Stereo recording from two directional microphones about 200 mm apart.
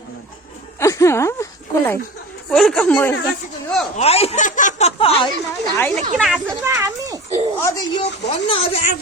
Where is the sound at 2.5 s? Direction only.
Centre (ahead or behind).